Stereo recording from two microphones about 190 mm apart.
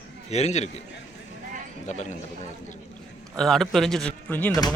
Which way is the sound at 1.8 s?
35° left (ahead or behind).